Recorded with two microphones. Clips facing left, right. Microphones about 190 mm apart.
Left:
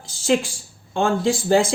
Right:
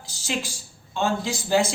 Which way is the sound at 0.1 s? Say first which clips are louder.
Left 10 dB; 55° left (ahead or behind).